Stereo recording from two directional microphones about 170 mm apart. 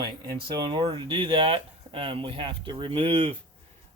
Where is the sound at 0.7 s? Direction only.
25° right (ahead or behind).